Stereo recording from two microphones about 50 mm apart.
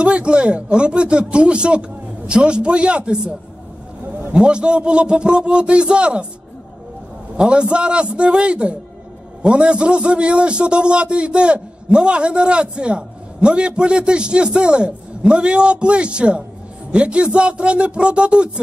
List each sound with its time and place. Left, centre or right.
0.0 s a man's voice: right
7.3 s a man's voice: centre